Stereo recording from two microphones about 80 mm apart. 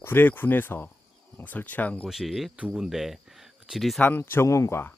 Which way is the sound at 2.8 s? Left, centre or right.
Centre.